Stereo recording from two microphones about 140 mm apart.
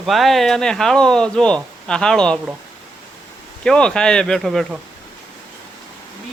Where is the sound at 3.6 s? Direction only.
5° left (ahead or behind).